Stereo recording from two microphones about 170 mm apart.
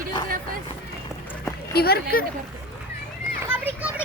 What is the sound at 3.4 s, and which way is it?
Children playing, 10° right (ahead or behind).